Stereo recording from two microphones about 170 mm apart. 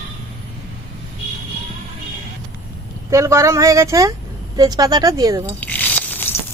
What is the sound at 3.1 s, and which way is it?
Speech, 15° right (ahead or behind).